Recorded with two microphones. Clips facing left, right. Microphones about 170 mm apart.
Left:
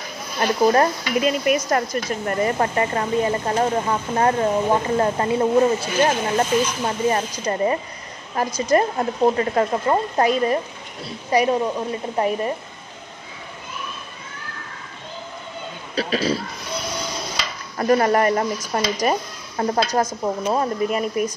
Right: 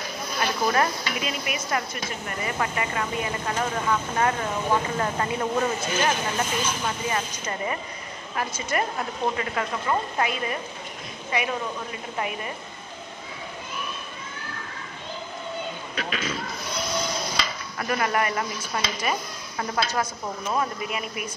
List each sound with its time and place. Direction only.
0.4 s speech: 40° left (ahead or behind)
15.9 s speech: 35° left (ahead or behind)
17.7 s speech: 35° left (ahead or behind)